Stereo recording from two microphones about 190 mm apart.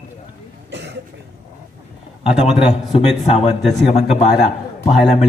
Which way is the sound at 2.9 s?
30° left (ahead or behind).